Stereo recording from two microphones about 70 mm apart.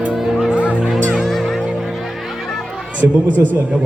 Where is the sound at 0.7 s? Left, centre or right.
Centre.